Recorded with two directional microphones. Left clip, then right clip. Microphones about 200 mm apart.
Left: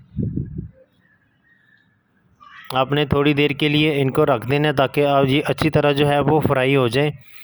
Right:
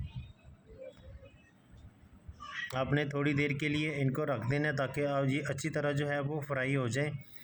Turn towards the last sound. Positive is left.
turn(degrees=45)  # may be behind; listen again after turning